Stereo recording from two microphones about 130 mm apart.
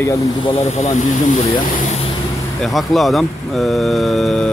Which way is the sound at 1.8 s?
60° left (ahead or behind).